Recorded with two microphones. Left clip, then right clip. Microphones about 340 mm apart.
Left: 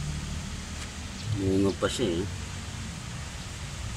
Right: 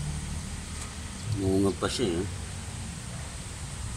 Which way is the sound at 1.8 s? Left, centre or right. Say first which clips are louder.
Left 1 dB; centre.